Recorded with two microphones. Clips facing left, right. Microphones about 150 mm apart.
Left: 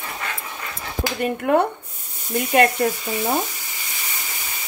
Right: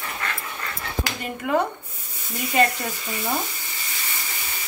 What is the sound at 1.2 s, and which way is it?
Frying, 60° left (ahead or behind).